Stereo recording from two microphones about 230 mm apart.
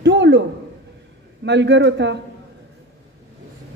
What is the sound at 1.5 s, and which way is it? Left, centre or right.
Speech, right.